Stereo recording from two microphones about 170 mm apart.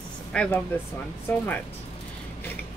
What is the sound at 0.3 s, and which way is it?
Speech, 5° left (ahead or behind).